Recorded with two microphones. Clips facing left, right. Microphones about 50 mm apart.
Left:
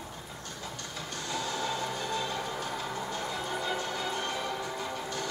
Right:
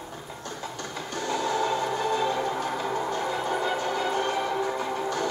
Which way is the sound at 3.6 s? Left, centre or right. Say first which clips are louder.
Right 6 dB; centre.